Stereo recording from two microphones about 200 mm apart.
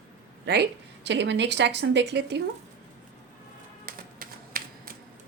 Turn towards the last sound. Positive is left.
turn(degrees=-45)  # may be behind; listen again after turning